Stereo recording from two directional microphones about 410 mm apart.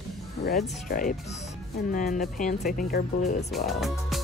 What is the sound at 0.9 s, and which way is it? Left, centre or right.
Speech, centre.